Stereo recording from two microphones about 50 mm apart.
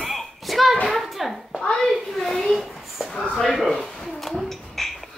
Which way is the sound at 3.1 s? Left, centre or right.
Left.